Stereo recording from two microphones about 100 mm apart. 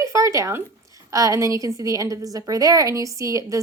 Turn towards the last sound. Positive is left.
turn(degrees=-35)  # may be behind; listen again after turning